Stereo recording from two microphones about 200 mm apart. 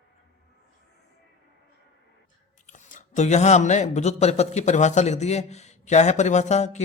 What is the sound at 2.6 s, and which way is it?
Speech, 40° left (ahead or behind).